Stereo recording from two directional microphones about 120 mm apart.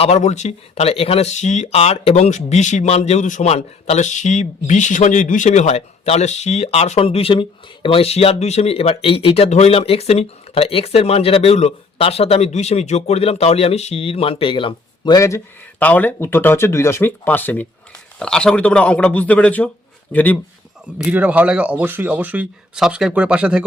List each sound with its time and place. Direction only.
0.0 s speech: 70° left (ahead or behind); by 15.2 s 40° left (ahead or behind)
15.8 s speech: 15° left (ahead or behind)
21.1 s speech: 10° right (ahead or behind)